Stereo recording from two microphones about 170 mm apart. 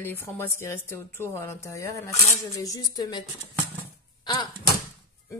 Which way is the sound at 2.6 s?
20° left (ahead or behind).